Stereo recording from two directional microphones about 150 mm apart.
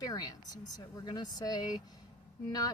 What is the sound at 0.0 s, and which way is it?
Speech, 25° left (ahead or behind).